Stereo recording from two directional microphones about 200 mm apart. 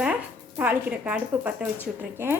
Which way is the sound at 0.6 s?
10° right (ahead or behind).